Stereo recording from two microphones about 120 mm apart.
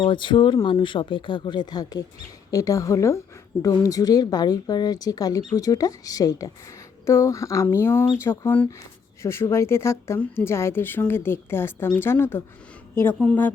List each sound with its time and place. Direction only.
0.0 s a woman's voice: 40° left (ahead or behind); by 13.5 s 10° left (ahead or behind)